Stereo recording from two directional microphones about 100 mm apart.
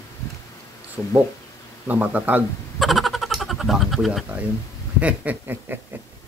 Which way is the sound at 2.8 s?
Centre (ahead or behind).